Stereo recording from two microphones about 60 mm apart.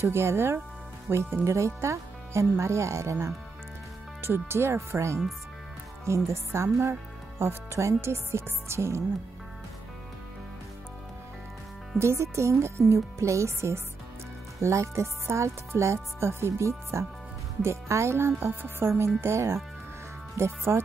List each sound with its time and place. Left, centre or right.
0.0 s speech: right
4.2 s speech: right
12.0 s speech: right